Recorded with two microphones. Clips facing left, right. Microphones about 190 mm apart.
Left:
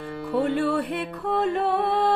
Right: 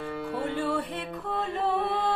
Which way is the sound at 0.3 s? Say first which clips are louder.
Left 7 dB; 65° left (ahead or behind).